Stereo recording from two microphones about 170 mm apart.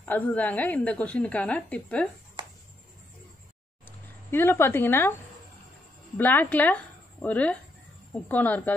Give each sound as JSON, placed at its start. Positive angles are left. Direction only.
{"t": 0.0, "sound": "a woman's voice", "side_deg": 10}
{"t": 2.4, "sound": "a sound", "side_deg": -30}
{"t": 3.8, "sound": "speech", "side_deg": 15}
{"t": 6.1, "sound": "a woman's voice", "side_deg": 10}